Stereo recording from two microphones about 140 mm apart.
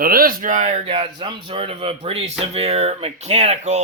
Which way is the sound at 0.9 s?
40° right (ahead or behind).